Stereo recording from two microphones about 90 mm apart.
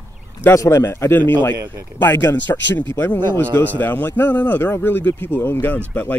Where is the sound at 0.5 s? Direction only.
35° left (ahead or behind); by 6.2 s 20° left (ahead or behind).